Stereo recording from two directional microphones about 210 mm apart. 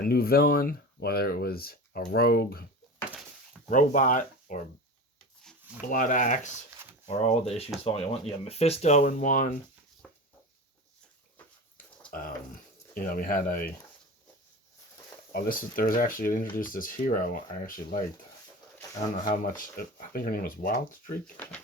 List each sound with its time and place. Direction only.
0.0 s speech: 45° left (ahead or behind)
3.7 s speech: 40° left (ahead or behind)
5.8 s speech: 40° left (ahead or behind)
10.0 s a sound: 5° left (ahead or behind)
12.1 s speech: 45° left (ahead or behind)
15.3 s speech: 45° left (ahead or behind)